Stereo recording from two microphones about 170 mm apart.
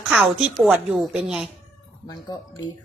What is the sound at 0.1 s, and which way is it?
A woman's voice, 5° right (ahead or behind).